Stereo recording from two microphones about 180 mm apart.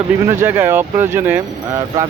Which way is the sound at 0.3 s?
15° right (ahead or behind).